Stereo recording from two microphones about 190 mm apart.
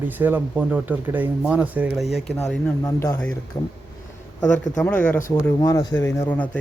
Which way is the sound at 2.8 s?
15° left (ahead or behind).